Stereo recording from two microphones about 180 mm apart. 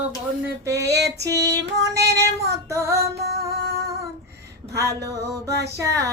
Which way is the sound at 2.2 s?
15° right (ahead or behind).